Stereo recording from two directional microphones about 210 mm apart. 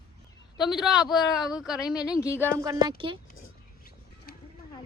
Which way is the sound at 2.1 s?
15° left (ahead or behind).